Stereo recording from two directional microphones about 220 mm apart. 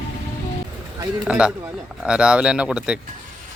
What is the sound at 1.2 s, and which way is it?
Speech, 5° right (ahead or behind).